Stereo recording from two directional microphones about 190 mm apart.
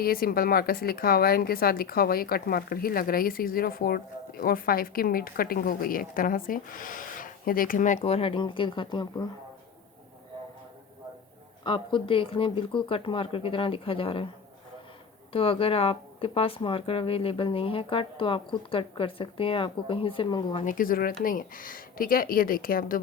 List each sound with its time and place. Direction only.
0.0 s speech: 50° left (ahead or behind); by 9.2 s 25° left (ahead or behind)
11.6 s speech: 25° left (ahead or behind)
15.3 s speech: 30° left (ahead or behind)
20.7 s speech: 45° left (ahead or behind)